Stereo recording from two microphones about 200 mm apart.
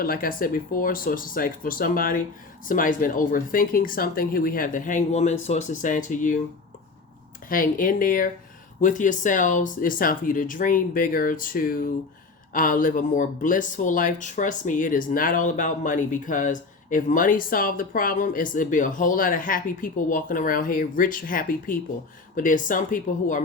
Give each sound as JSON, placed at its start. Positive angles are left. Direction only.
{"t": 0.0, "sound": "speech", "side_deg": 45}
{"t": 7.4, "sound": "speech", "side_deg": 45}